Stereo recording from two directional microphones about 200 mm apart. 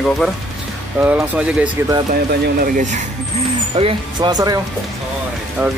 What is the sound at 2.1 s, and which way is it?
Speech, 45° right (ahead or behind).